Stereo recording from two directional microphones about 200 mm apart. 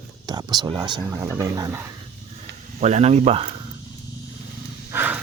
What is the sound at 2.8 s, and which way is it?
Speech, 35° right (ahead or behind).